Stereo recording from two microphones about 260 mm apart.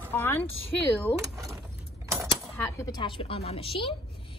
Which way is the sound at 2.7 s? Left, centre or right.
Centre.